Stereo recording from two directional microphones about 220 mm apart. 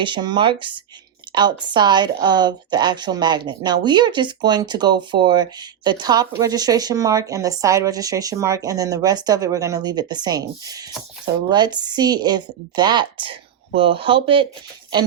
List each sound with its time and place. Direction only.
0.0 s speech: 20° right (ahead or behind)